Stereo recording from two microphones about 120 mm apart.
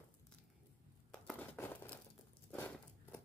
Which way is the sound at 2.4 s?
15° left (ahead or behind).